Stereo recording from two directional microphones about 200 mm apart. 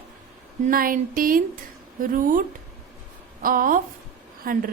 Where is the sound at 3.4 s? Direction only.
45° right (ahead or behind).